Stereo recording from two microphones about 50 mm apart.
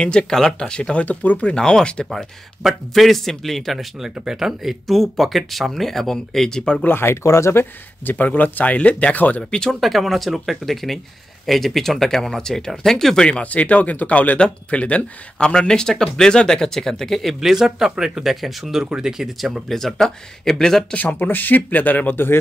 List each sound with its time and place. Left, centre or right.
0.0 s speech: centre
1.0 s speech: left
1.5 s speech: centre
2.6 s speech: centre
4.2 s speech: centre
6.8 s speech: left
7.2 s speech: left
7.5 s speech: left
9.5 s speech: centre
9.8 s speech: centre
13.4 s speech: left; by 17.4 s centre
17.4 s speech: centre
19.7 s speech: centre
20.9 s speech: left